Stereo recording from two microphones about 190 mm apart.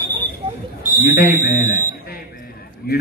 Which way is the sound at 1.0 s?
45° left (ahead or behind).